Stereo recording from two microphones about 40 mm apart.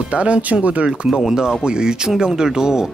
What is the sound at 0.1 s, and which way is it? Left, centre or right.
Speech, right.